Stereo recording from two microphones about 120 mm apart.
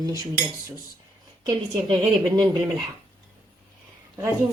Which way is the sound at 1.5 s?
35° right (ahead or behind).